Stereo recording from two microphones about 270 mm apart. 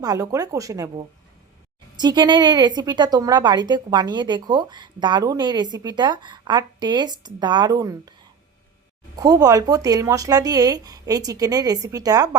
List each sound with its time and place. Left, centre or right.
0.0 s a woman's voice: centre
9.1 s a woman's voice: centre